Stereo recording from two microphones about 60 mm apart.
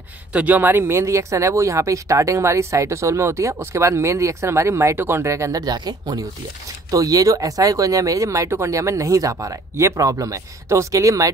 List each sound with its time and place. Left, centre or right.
0.3 s speech: right
0.6 s speech: right
10.7 s speech: right